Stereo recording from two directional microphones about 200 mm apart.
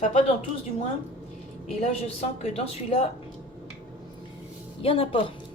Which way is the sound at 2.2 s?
30° left (ahead or behind).